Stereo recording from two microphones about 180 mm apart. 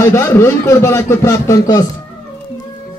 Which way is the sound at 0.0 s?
15° left (ahead or behind).